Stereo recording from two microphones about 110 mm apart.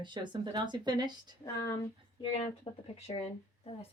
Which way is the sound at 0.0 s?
45° right (ahead or behind).